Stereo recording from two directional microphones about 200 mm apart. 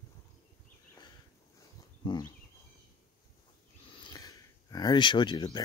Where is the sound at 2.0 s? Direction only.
20° left (ahead or behind).